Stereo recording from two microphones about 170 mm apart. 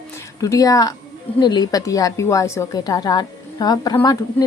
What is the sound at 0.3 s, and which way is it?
A woman's voice, 20° left (ahead or behind).